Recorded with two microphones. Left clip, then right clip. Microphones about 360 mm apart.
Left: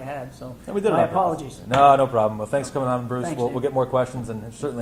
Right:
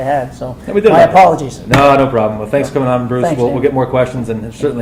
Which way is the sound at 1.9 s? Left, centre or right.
Left.